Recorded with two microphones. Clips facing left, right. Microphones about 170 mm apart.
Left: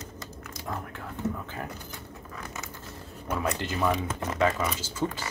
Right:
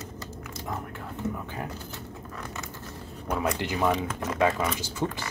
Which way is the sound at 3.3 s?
15° right (ahead or behind).